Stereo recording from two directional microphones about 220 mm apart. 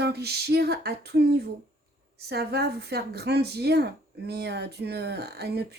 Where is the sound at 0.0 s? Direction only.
45° right (ahead or behind).